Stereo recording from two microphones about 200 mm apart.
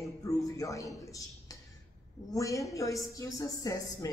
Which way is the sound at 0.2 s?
15° left (ahead or behind).